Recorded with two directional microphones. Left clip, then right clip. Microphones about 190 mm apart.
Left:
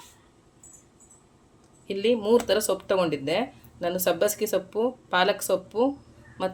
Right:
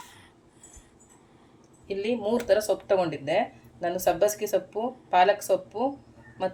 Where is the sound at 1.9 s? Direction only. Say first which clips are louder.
Left 5 dB; 40° left (ahead or behind).